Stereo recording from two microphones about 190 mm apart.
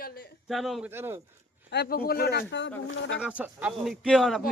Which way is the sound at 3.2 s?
5° right (ahead or behind).